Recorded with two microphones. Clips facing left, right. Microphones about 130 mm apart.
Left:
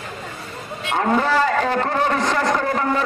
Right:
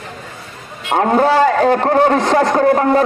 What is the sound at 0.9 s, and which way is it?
A man's voice, 50° right (ahead or behind).